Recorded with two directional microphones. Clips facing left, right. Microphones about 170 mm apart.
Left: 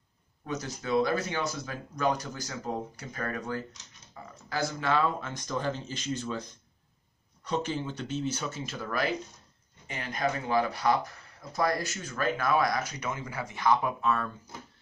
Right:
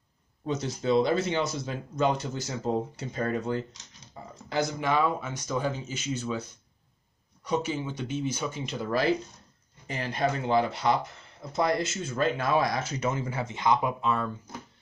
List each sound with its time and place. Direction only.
0.5 s speech: 25° right (ahead or behind); by 6.4 s 5° right (ahead or behind)
7.4 s speech: 10° right (ahead or behind)